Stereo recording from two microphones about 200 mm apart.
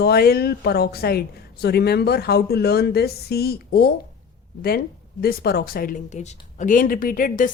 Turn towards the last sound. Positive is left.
turn(degrees=45)  # may be behind; listen again after turning